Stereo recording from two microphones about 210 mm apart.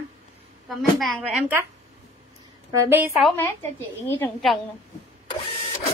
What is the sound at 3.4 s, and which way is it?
A woman's voice, 10° left (ahead or behind).